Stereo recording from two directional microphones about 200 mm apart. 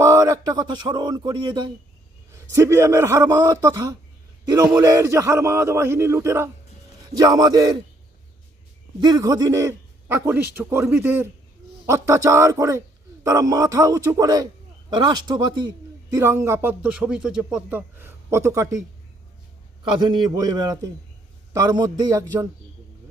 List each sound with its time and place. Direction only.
0.0 s a sound: 15° right (ahead or behind)
2.3 s a man's voice: 15° right (ahead or behind)
9.0 s a man's voice: 20° right (ahead or behind)
19.8 s a man's voice: 20° right (ahead or behind)